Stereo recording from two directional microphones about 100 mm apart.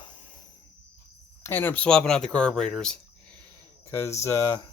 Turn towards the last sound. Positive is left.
turn(degrees=30)  # may be behind; listen again after turning